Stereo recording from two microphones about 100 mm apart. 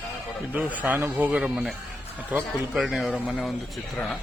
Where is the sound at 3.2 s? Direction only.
15° left (ahead or behind).